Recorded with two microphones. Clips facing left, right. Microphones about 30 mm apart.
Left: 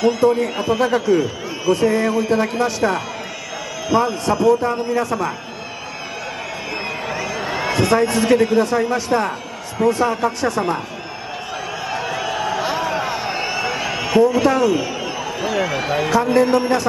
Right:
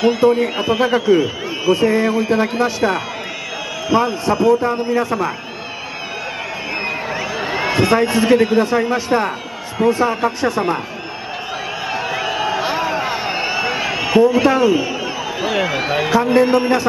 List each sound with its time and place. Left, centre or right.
0.0 s a man's voice: centre
7.1 s a man's voice: centre
11.9 s a sound: centre
15.4 s a man's voice: centre